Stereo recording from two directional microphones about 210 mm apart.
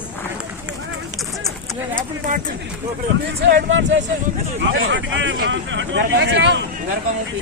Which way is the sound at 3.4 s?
60° right (ahead or behind).